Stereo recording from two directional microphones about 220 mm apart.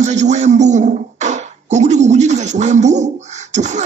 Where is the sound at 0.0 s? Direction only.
30° right (ahead or behind).